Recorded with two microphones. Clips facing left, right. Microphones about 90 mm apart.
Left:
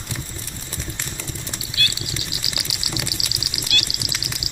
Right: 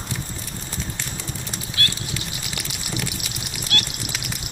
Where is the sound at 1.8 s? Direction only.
40° right (ahead or behind).